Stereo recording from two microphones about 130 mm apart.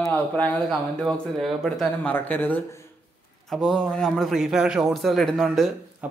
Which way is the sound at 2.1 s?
15° left (ahead or behind).